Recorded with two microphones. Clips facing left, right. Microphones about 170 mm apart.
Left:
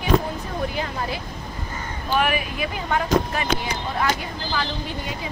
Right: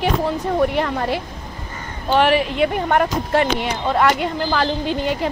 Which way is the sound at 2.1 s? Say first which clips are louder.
Right 7 dB; 80° right.